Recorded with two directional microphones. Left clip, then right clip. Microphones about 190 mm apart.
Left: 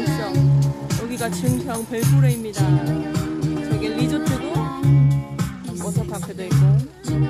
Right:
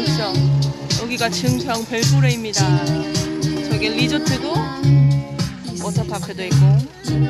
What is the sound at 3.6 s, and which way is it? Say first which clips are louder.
Music: right 5 dB; 5° left (ahead or behind).